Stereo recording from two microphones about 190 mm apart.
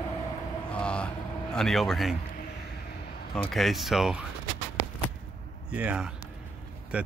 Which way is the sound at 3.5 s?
Centre (ahead or behind).